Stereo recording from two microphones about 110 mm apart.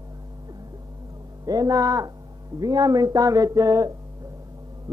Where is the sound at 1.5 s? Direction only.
35° right (ahead or behind).